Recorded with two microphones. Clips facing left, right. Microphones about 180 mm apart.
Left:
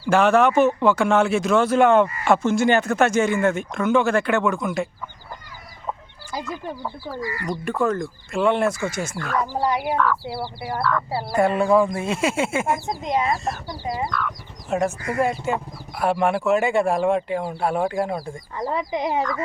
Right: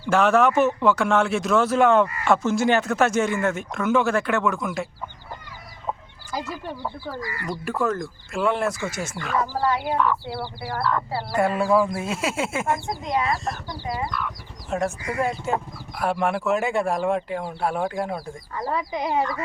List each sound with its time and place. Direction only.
0.0 s speech: centre (ahead or behind)
7.4 s speech: 5° right (ahead or behind)
9.9 s speech: 20° right (ahead or behind)
10.4 s speech: 25° left (ahead or behind)
11.3 s speech: 5° right (ahead or behind)
12.9 s speech: 20° left (ahead or behind)
14.7 s speech: centre (ahead or behind)
18.7 s speech: 20° left (ahead or behind)